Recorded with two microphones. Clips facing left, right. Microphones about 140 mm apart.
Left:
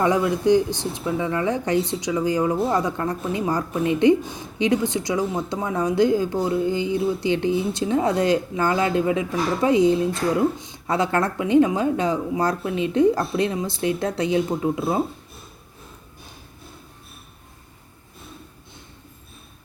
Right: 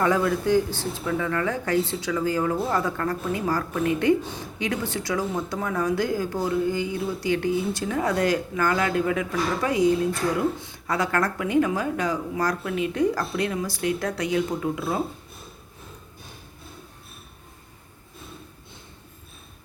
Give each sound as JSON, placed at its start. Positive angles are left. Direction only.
{"t": 0.0, "sound": "speech", "side_deg": 20}